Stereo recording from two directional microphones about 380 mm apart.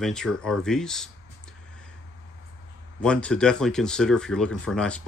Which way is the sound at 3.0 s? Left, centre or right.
Centre.